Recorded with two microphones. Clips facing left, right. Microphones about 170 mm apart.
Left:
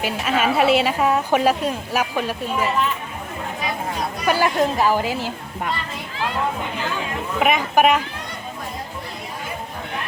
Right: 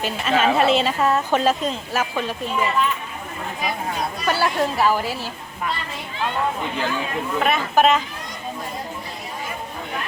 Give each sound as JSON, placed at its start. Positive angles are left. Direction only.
{"t": 0.0, "sound": "a woman's voice", "side_deg": 10}
{"t": 4.3, "sound": "a woman's voice", "side_deg": 15}
{"t": 7.3, "sound": "a woman's voice", "side_deg": 15}